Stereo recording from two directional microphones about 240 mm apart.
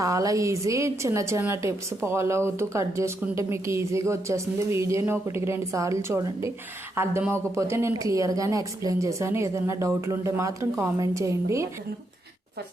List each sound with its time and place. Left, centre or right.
0.0 s a woman's voice: centre